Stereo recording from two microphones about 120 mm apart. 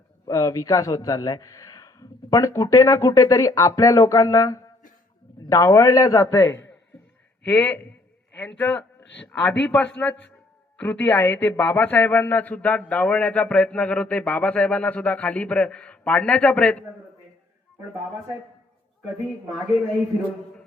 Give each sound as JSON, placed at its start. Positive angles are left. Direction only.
{"t": 0.3, "sound": "a man's voice", "side_deg": 25}
{"t": 7.4, "sound": "speech", "side_deg": 15}